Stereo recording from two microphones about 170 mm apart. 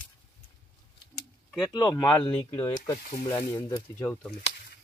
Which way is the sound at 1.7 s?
25° left (ahead or behind).